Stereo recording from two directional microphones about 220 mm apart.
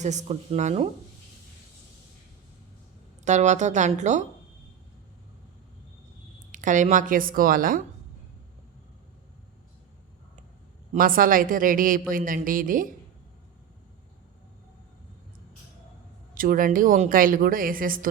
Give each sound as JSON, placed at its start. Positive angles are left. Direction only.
{"t": 0.0, "sound": "speech", "side_deg": -30}
{"t": 3.2, "sound": "speech", "side_deg": -35}
{"t": 6.5, "sound": "speech", "side_deg": -35}
{"t": 10.9, "sound": "speech", "side_deg": -40}
{"t": 16.3, "sound": "speech", "side_deg": -40}